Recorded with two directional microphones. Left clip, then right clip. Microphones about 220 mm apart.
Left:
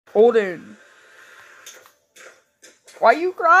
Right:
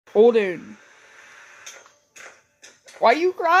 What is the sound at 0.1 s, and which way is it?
Speech, 5° right (ahead or behind).